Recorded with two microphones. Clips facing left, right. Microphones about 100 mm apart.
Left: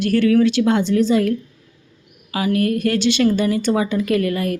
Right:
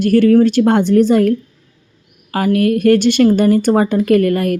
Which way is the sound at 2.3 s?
50° right (ahead or behind).